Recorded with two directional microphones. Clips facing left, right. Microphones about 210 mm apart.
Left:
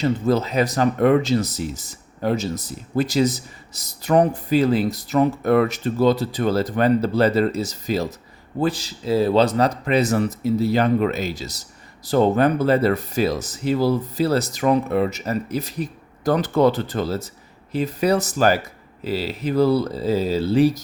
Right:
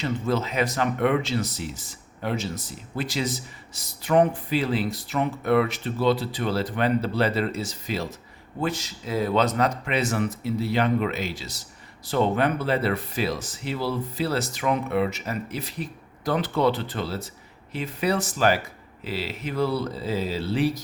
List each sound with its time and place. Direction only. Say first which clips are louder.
0.0 s speech: left 6 dB; 40° left (ahead or behind)